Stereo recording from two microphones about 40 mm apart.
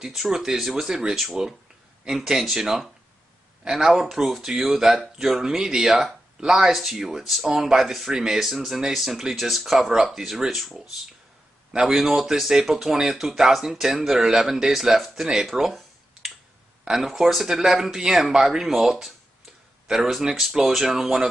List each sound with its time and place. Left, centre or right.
0.0 s speech: centre
11.9 s speech: centre
15.5 s a sound: centre
16.8 s speech: centre